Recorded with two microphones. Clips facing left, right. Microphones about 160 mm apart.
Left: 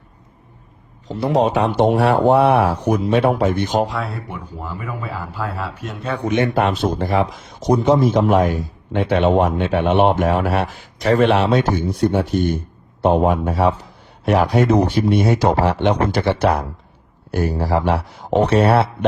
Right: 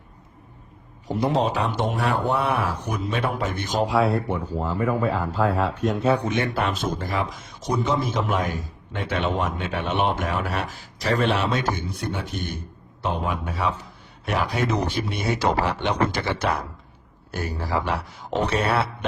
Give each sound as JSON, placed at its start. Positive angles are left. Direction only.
{"t": 1.0, "sound": "a man's voice", "side_deg": -10}
{"t": 1.3, "sound": "speech", "side_deg": 30}
{"t": 1.6, "sound": "speech", "side_deg": 50}
{"t": 3.8, "sound": "speech", "side_deg": 0}
{"t": 6.3, "sound": "speech", "side_deg": 35}
{"t": 7.5, "sound": "speech", "side_deg": 55}
{"t": 11.6, "sound": "a man's voice", "side_deg": 55}